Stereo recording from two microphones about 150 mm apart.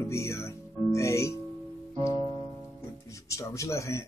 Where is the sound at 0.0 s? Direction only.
20° left (ahead or behind).